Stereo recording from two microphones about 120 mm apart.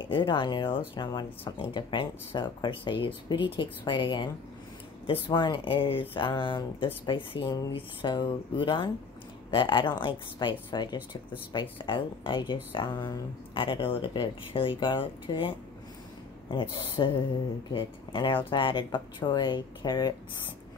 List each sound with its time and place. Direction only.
0.0 s speech: 40° left (ahead or behind)